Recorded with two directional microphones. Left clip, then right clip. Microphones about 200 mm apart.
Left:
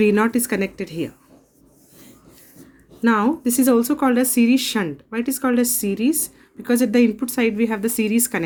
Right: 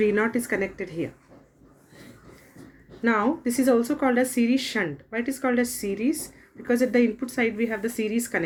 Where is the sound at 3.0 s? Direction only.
50° left (ahead or behind).